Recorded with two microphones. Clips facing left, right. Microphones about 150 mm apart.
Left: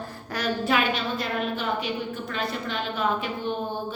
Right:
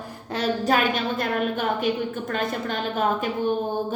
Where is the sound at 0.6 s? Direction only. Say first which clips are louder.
Right 2 dB; 45° right (ahead or behind).